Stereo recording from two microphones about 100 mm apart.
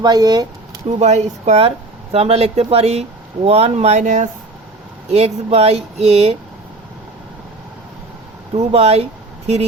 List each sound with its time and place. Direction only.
0.0 s speech: 45° right (ahead or behind)
0.9 s speech: 90° right
5.1 s speech: 90° right
8.5 s speech: 90° right